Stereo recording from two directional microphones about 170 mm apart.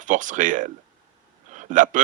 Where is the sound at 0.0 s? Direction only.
50° right (ahead or behind).